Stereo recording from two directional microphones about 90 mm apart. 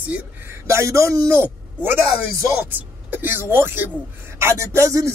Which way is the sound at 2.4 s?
20° right (ahead or behind).